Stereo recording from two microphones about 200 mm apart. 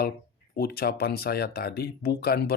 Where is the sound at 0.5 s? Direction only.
50° left (ahead or behind).